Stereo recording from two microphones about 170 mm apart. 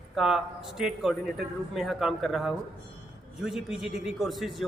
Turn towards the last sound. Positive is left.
turn(degrees=0)  # may be behind; listen again after turning